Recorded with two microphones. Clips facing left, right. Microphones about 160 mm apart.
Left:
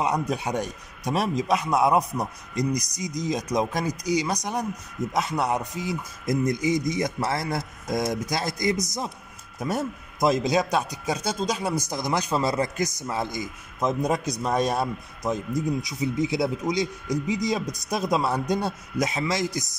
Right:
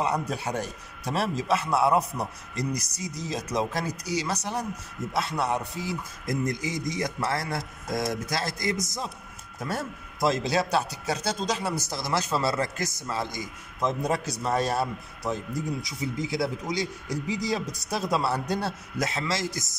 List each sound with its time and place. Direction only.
0.0 s a man's voice: 15° left (ahead or behind)